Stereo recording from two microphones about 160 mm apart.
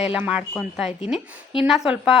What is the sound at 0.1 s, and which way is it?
A woman's voice, 5° right (ahead or behind).